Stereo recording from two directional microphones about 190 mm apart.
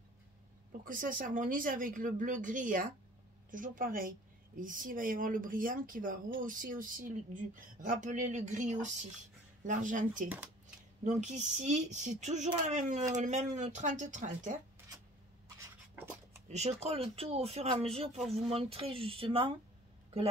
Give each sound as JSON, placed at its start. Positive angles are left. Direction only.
{"t": 0.7, "sound": "speech", "side_deg": -45}
{"t": 10.2, "sound": "speech", "side_deg": -10}
{"t": 11.1, "sound": "speech", "side_deg": -35}
{"t": 16.4, "sound": "speech", "side_deg": -35}